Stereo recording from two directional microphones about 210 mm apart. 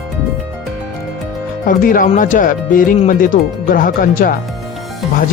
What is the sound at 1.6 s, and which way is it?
Speech, 40° left (ahead or behind).